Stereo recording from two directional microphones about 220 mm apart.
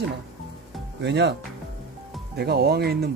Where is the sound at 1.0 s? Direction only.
50° right (ahead or behind).